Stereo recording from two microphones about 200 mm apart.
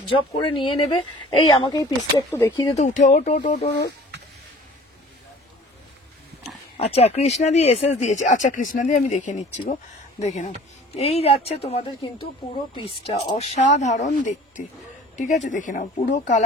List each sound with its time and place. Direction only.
0.1 s speech: 25° left (ahead or behind)
2.7 s speech: 35° left (ahead or behind)
3.5 s speech: 55° left (ahead or behind)
6.8 s speech: 30° left (ahead or behind)